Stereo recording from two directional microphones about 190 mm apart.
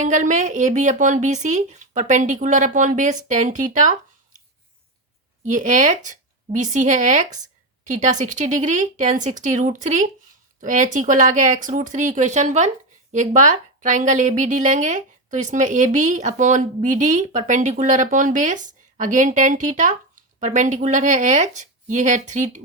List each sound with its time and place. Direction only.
0.0 s a woman's voice: 40° right (ahead or behind)
5.5 s a woman's voice: 40° right (ahead or behind)